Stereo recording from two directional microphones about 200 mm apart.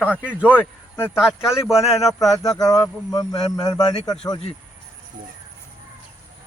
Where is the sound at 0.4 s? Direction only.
10° left (ahead or behind).